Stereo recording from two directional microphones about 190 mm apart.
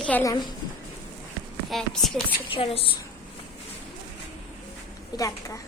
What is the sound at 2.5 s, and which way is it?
Speech, 30° left (ahead or behind).